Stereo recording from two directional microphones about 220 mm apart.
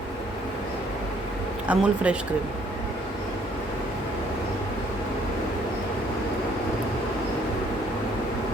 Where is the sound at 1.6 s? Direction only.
5° right (ahead or behind).